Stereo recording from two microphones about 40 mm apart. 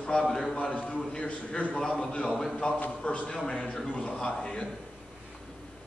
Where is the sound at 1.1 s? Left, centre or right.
Centre.